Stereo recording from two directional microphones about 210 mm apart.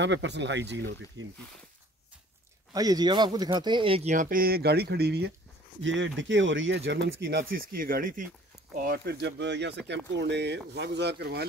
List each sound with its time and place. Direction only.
0.0 s speech: 60° right (ahead or behind)
2.7 s speech: 20° right (ahead or behind); by 5.3 s 50° right (ahead or behind)
5.8 s speech: 60° right (ahead or behind)